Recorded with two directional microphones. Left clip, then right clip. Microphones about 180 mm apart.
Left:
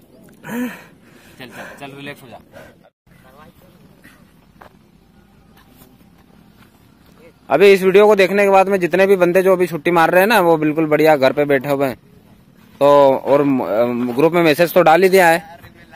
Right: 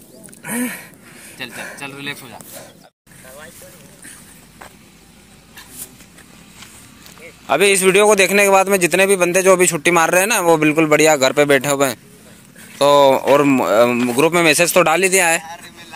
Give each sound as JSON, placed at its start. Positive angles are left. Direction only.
{"t": 0.4, "sound": "speech", "side_deg": 15}
{"t": 1.8, "sound": "speech", "side_deg": 55}
{"t": 7.4, "sound": "speech", "side_deg": 0}